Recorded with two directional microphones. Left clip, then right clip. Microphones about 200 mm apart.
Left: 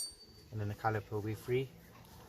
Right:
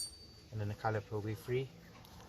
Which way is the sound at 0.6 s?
20° left (ahead or behind).